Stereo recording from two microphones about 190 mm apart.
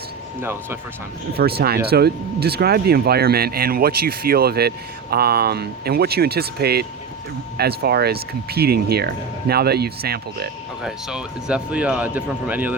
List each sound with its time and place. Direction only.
0.4 s speech: 15° right (ahead or behind)
1.3 s speech: 55° right (ahead or behind)
10.8 s speech: 5° right (ahead or behind)